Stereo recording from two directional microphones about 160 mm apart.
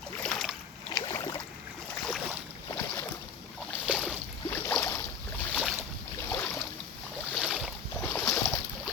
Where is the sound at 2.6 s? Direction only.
15° left (ahead or behind).